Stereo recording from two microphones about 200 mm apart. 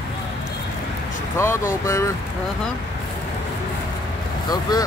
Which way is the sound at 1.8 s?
15° left (ahead or behind).